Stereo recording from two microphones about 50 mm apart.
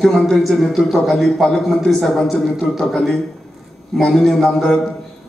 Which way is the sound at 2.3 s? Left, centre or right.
Centre.